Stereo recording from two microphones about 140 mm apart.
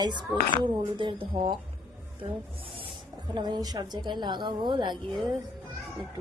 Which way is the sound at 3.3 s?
30° right (ahead or behind).